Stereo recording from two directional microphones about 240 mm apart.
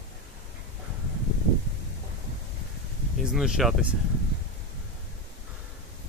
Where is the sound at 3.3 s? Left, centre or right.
Centre.